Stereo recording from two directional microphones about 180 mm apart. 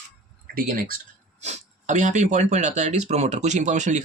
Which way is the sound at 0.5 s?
55° right (ahead or behind).